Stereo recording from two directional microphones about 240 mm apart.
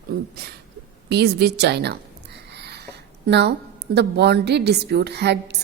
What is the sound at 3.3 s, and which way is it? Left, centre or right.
A woman's voice, right.